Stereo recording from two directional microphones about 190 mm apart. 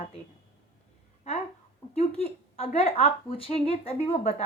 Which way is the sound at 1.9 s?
30° left (ahead or behind).